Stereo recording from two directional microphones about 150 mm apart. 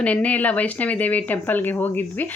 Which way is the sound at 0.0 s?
10° left (ahead or behind).